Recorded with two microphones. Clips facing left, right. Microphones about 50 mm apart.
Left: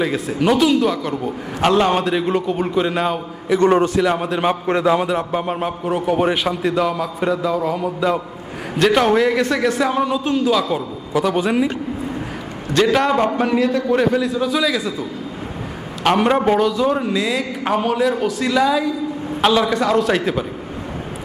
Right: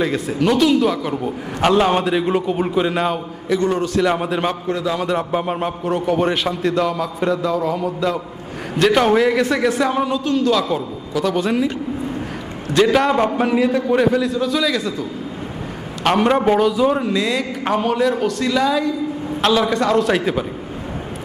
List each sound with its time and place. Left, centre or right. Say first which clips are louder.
0.0 s a man's voice: even; centre
3.6 s a man's voice: left 7 dB; left
4.0 s a man's voice: even; centre
4.6 s a man's voice: left 5 dB; left
5.0 s a man's voice: even; centre
12.7 s a man's voice: right 1 dB; centre
16.0 s a man's voice: even; centre